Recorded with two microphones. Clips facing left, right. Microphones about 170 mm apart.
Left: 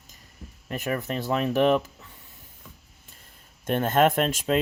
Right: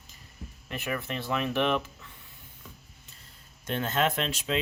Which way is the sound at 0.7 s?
40° left (ahead or behind).